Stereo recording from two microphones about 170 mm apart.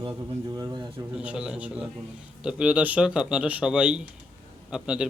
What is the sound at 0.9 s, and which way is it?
A man's voice, 5° right (ahead or behind).